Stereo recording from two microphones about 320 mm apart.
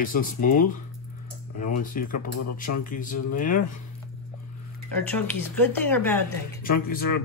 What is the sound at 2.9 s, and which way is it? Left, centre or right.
Speech, left.